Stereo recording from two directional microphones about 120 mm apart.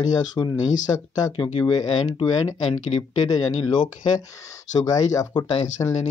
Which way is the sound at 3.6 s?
40° left (ahead or behind).